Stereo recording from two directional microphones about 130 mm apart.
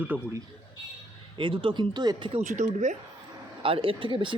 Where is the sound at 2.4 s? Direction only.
70° right (ahead or behind).